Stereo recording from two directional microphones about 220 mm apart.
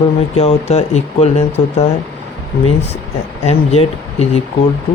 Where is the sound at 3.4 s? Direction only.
30° left (ahead or behind).